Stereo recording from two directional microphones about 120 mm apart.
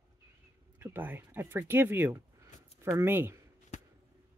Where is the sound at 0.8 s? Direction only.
15° right (ahead or behind).